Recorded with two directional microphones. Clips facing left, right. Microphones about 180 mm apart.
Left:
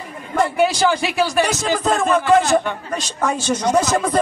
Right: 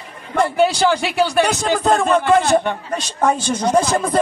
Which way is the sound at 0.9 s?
60° right (ahead or behind).